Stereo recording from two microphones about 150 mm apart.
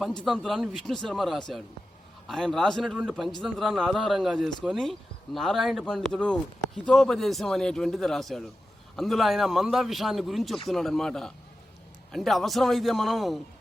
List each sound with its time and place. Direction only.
0.2 s speech: 5° left (ahead or behind)